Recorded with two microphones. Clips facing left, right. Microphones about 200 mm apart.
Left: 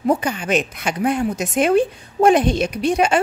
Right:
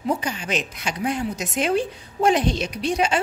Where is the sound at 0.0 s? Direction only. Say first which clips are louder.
Left 6 dB; 55° left (ahead or behind).